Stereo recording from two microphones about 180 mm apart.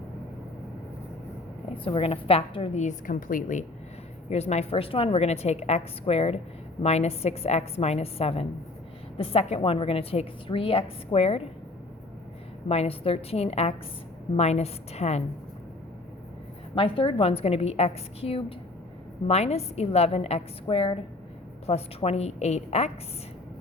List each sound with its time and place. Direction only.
1.8 s a woman's voice: 30° left (ahead or behind)
12.6 s a woman's voice: 35° left (ahead or behind)
16.7 s a woman's voice: 30° left (ahead or behind)